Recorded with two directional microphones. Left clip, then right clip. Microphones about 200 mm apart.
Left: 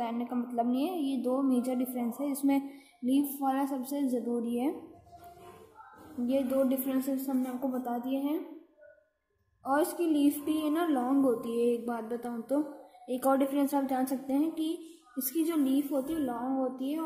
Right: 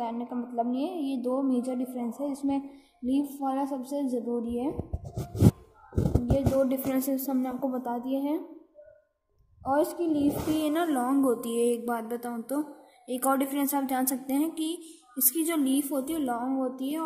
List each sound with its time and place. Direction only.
0.0 s a woman's voice: centre (ahead or behind)
6.2 s a woman's voice: centre (ahead or behind)
9.6 s a woman's voice: centre (ahead or behind)